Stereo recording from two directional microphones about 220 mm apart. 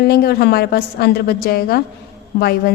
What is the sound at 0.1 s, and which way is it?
A woman's voice, 45° left (ahead or behind).